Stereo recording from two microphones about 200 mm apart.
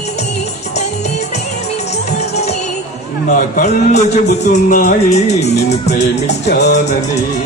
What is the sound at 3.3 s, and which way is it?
A man's voice, 40° left (ahead or behind).